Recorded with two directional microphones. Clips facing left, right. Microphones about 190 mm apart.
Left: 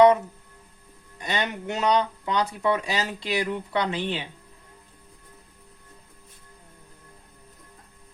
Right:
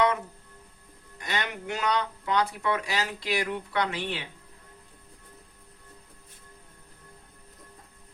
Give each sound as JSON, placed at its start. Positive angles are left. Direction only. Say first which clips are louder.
{"t": 1.2, "sound": "speech", "louder": "left 4 dB", "side_deg": 20}